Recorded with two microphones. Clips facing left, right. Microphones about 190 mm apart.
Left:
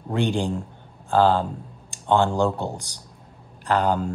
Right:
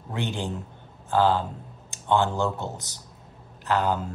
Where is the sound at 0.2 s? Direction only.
15° left (ahead or behind).